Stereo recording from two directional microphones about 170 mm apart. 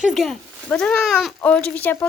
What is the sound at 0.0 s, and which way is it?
Speech, centre (ahead or behind).